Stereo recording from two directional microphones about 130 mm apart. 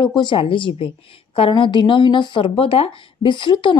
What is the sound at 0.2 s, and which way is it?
A woman's voice, 40° left (ahead or behind).